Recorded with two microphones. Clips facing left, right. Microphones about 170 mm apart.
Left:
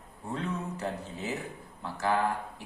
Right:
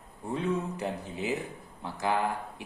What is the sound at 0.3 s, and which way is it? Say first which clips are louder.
A man's voice: right 4 dB; 15° right (ahead or behind).